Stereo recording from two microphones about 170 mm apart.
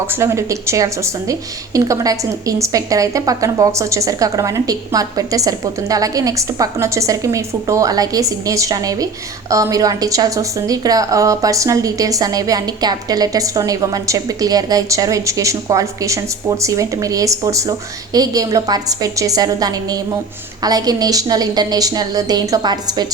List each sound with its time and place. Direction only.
0.1 s a woman's voice: 15° right (ahead or behind)